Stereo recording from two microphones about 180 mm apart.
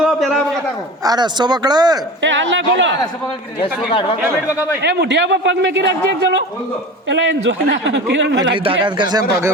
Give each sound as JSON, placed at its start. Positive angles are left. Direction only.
{"t": 0.0, "sound": "a sound", "side_deg": 0}
{"t": 1.0, "sound": "speech", "side_deg": -25}
{"t": 2.2, "sound": "a man's voice", "side_deg": -90}
{"t": 3.6, "sound": "speech", "side_deg": 30}
{"t": 4.8, "sound": "a man's voice", "side_deg": -75}
{"t": 7.1, "sound": "a man's voice", "side_deg": -90}
{"t": 8.5, "sound": "speech", "side_deg": -30}